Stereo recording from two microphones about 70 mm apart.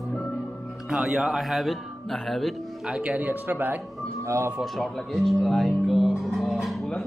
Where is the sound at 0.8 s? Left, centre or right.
Centre.